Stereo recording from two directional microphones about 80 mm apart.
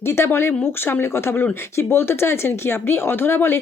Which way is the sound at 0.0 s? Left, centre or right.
Left.